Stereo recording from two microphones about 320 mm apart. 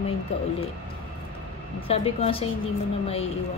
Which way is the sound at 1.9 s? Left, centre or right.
Centre.